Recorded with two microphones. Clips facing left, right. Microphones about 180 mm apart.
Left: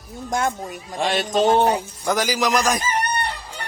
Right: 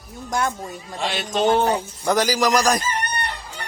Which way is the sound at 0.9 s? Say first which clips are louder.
Left 4 dB; 50° left (ahead or behind).